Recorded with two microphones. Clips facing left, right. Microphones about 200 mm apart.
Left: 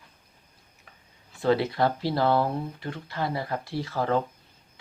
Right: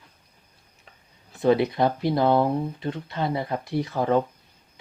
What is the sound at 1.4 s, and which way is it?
Speech, 20° right (ahead or behind).